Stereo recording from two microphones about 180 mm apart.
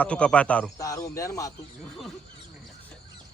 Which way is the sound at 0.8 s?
20° left (ahead or behind).